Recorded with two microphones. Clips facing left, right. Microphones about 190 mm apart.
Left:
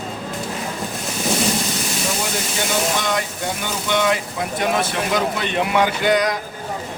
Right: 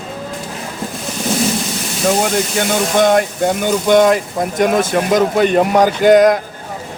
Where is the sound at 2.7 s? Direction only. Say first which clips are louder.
Right 9 dB; 50° right (ahead or behind).